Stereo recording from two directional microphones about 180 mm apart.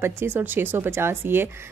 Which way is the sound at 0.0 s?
10° right (ahead or behind).